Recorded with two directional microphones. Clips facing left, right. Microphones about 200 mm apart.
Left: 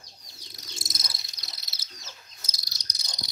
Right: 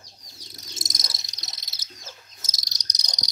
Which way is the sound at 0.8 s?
40° right (ahead or behind).